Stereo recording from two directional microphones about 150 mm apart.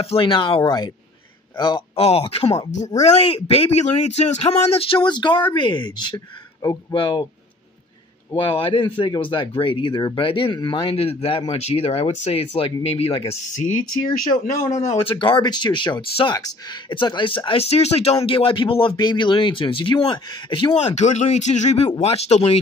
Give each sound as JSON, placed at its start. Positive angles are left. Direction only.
{"t": 0.0, "sound": "speech", "side_deg": 35}
{"t": 8.4, "sound": "speech", "side_deg": 35}
{"t": 13.5, "sound": "speech", "side_deg": 60}
{"t": 15.0, "sound": "speech", "side_deg": 35}
{"t": 20.8, "sound": "speech", "side_deg": 50}